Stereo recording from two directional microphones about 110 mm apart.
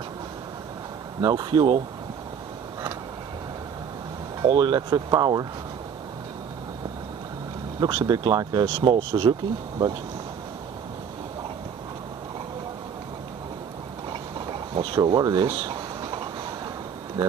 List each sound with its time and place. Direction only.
1.2 s speech: 40° right (ahead or behind)
4.4 s speech: 40° right (ahead or behind)
7.8 s speech: 40° right (ahead or behind)
14.4 s a sound: 50° right (ahead or behind)
15.0 s speech: 35° right (ahead or behind)
17.2 s speech: 35° right (ahead or behind)